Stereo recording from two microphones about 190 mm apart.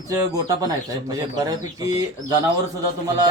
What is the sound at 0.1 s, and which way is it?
Speech, 20° right (ahead or behind).